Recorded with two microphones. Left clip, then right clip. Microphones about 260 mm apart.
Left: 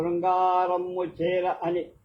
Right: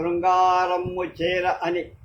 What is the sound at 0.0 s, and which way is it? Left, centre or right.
Speech, right.